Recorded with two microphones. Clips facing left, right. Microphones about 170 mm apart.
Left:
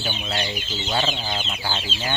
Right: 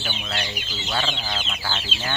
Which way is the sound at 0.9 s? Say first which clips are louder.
Left 2 dB; 20° left (ahead or behind).